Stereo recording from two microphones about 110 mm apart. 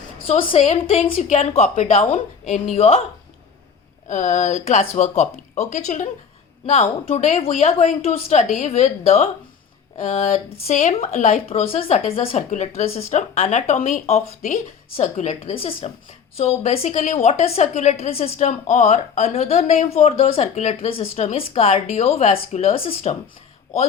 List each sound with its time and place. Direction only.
0.3 s a woman's voice: 60° left (ahead or behind)
0.6 s speech: 90° left
2.7 s a woman's voice: 60° left (ahead or behind)
4.1 s a woman's voice: 90° left; by 15.9 s 60° left (ahead or behind)
16.4 s a woman's voice: 70° left (ahead or behind)